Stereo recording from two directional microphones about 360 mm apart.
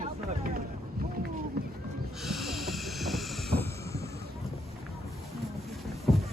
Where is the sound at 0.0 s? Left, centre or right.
Right.